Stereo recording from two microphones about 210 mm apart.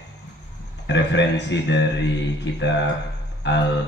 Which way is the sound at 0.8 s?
55° left (ahead or behind).